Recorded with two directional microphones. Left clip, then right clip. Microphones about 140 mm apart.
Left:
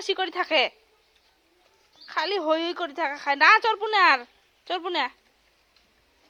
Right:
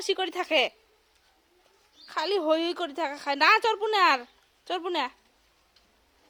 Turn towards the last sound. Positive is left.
turn(degrees=-10)  # may be behind; listen again after turning